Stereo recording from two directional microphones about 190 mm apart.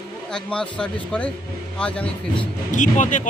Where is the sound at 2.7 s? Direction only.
40° left (ahead or behind).